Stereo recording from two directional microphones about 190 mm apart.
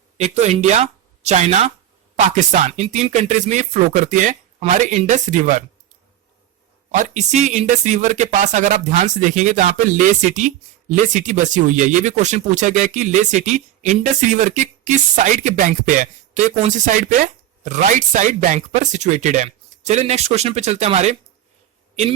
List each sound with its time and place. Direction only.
0.2 s speech: 35° right (ahead or behind)
6.9 s speech: 40° right (ahead or behind)